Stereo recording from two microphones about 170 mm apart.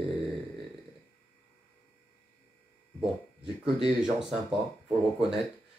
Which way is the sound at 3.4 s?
5° right (ahead or behind).